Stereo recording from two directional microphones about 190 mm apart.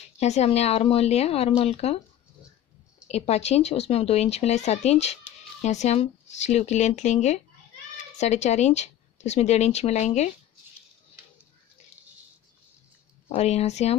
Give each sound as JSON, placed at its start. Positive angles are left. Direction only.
{"t": 0.2, "sound": "speech", "side_deg": 35}
{"t": 3.1, "sound": "speech", "side_deg": 35}
{"t": 13.3, "sound": "speech", "side_deg": 35}